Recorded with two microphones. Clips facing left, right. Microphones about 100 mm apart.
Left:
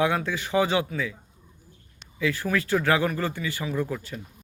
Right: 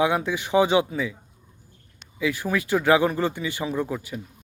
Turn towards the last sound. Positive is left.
turn(degrees=-10)  # may be behind; listen again after turning